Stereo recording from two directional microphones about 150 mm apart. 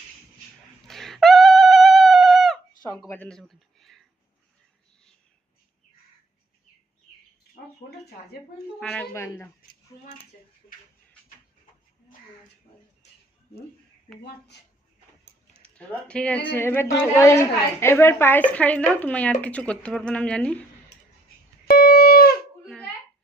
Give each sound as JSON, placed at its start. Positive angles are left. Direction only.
{"t": 0.9, "sound": "a sound", "side_deg": 0}
{"t": 3.1, "sound": "speech", "side_deg": 10}
{"t": 8.8, "sound": "speech", "side_deg": 5}
{"t": 9.1, "sound": "speech", "side_deg": 20}
{"t": 15.5, "sound": "speech", "side_deg": 10}
{"t": 21.7, "sound": "a sound", "side_deg": 90}